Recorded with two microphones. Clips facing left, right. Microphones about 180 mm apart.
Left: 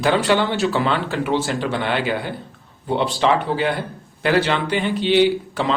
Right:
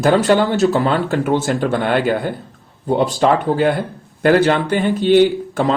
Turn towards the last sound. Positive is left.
turn(degrees=-45)  # may be behind; listen again after turning